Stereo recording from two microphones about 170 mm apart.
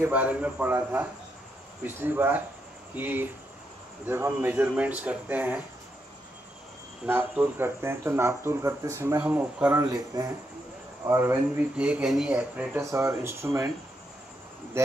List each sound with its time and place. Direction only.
0.0 s speech: 10° right (ahead or behind)
7.1 s speech: 10° right (ahead or behind)
9.8 s speech: 20° right (ahead or behind)